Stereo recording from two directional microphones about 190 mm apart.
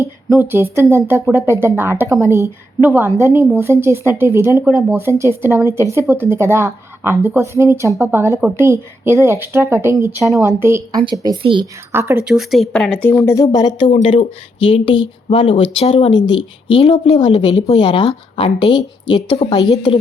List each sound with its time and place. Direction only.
0.3 s speech: 10° right (ahead or behind)
12.3 s a woman's voice: centre (ahead or behind); by 20.0 s 25° left (ahead or behind)